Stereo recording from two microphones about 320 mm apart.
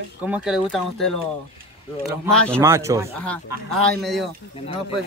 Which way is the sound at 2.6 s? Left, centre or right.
Centre.